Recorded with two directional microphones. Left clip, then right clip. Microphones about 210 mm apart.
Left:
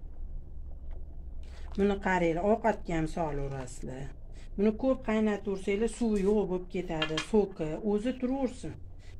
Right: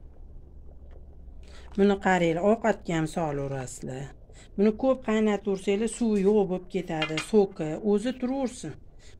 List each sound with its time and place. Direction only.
1.8 s speech: 55° right (ahead or behind)